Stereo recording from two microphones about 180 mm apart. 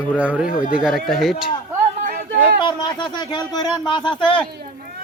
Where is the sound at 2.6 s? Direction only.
25° left (ahead or behind).